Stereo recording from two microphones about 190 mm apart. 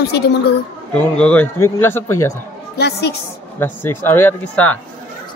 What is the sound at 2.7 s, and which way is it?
Speech, 60° left (ahead or behind).